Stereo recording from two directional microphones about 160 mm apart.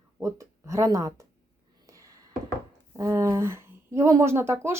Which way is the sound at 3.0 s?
20° right (ahead or behind).